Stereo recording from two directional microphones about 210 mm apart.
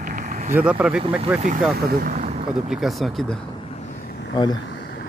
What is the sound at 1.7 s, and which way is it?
Speech, 45° right (ahead or behind).